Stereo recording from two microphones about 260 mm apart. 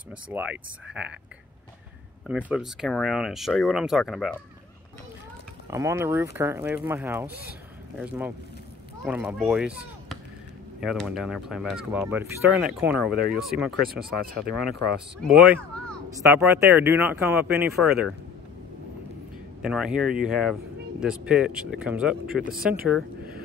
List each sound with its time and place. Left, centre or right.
0.3 s speech: centre
2.2 s speech: centre
5.7 s speech: centre
13.8 s speech: right
14.5 s speech: centre
16.1 s speech: centre
19.6 s speech: centre